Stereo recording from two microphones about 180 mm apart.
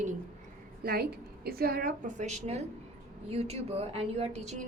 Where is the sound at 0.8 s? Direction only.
60° right (ahead or behind).